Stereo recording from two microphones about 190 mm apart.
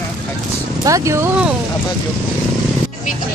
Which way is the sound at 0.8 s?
15° right (ahead or behind).